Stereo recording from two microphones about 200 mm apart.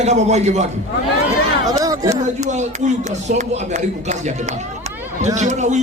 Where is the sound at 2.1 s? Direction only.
35° right (ahead or behind).